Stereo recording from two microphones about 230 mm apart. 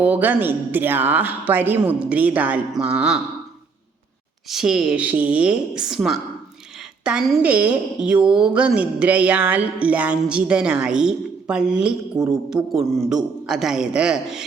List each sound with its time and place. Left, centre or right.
0.0 s speech: centre
4.4 s a woman's voice: centre